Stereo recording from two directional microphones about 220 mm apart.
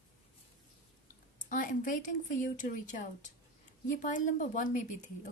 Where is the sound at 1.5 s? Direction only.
35° left (ahead or behind).